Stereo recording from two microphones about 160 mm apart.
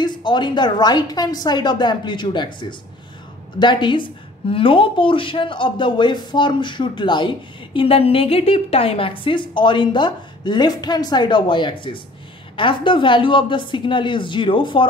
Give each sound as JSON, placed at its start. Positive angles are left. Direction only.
{"t": 0.0, "sound": "a woman's voice", "side_deg": 30}